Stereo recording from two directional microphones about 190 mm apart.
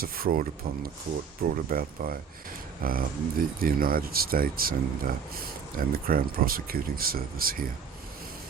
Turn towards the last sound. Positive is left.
turn(degrees=-50)  # may be behind; listen again after turning